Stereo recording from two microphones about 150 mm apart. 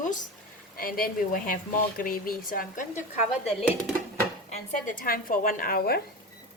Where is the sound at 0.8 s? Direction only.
75° left (ahead or behind).